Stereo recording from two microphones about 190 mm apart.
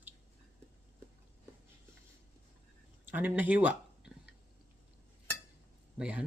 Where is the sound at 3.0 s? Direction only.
10° right (ahead or behind).